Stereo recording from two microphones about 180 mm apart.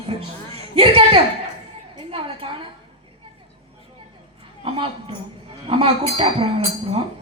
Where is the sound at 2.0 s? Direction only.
30° right (ahead or behind).